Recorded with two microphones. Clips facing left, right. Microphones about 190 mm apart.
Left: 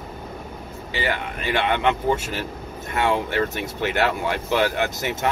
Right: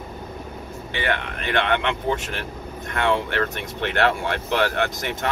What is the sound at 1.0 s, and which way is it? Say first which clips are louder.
Speech: even; 5° left (ahead or behind).